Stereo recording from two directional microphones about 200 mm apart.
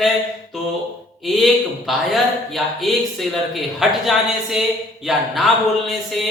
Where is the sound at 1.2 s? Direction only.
Centre (ahead or behind).